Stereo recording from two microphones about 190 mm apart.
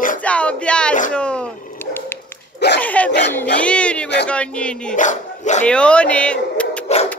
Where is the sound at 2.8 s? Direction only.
10° left (ahead or behind).